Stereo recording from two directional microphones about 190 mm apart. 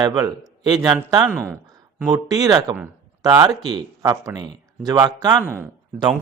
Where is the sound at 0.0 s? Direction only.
20° right (ahead or behind).